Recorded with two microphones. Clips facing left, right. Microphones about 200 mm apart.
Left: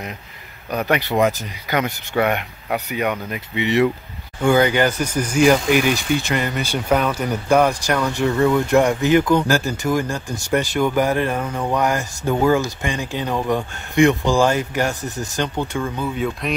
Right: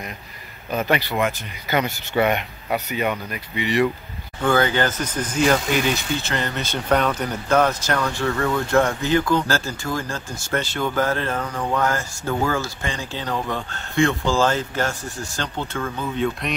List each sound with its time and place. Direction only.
0.8 s speech: 15° left (ahead or behind)
2.2 s speech: 10° left (ahead or behind)